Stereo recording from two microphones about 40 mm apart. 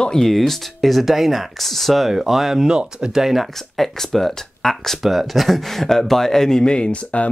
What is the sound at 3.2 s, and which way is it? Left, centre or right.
Speech, centre.